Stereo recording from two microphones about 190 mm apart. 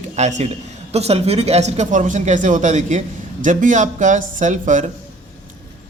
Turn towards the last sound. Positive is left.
turn(degrees=-40)  # may be behind; listen again after turning